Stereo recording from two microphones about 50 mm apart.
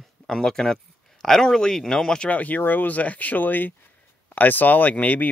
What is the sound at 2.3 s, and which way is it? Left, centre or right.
Speech, left.